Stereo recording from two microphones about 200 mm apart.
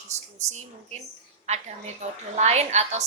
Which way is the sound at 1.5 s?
35° right (ahead or behind).